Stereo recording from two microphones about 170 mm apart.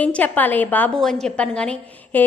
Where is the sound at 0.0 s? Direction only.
10° left (ahead or behind).